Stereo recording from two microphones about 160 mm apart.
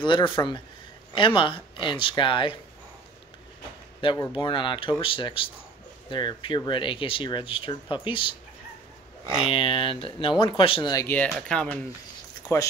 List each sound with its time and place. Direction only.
0.0 s speech: 30° left (ahead or behind)
4.0 s speech: 30° left (ahead or behind)
9.4 s speech: 35° left (ahead or behind)
11.1 s speech: 5° left (ahead or behind)
12.5 s speech: 20° left (ahead or behind)